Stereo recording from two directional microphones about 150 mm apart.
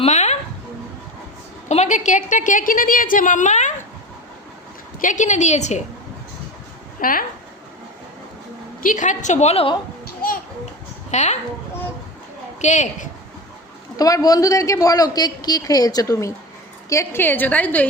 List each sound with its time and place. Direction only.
0.0 s a sound: 50° left (ahead or behind)
1.6 s a woman's voice: 50° left (ahead or behind)
4.9 s a woman's voice: 55° left (ahead or behind)
7.0 s speech: 70° left (ahead or behind)
8.8 s a woman's voice: 60° left (ahead or behind); by 9.7 s 40° left (ahead or behind)
11.1 s a woman's voice: 50° left (ahead or behind)
12.6 s a woman's voice: 50° left (ahead or behind)
13.9 s a man's voice: 25° left (ahead or behind)